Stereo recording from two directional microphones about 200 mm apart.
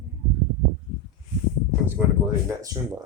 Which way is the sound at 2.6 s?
15° right (ahead or behind).